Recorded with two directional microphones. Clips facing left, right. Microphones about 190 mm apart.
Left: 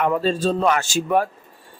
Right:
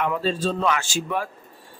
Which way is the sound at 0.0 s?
45° left (ahead or behind).